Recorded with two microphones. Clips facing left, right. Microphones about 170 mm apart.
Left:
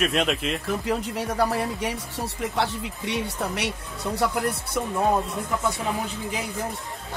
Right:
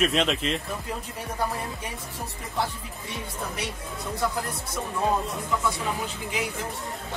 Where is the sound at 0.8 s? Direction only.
80° left.